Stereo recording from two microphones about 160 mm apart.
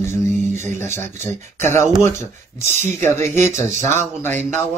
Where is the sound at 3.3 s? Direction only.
15° left (ahead or behind).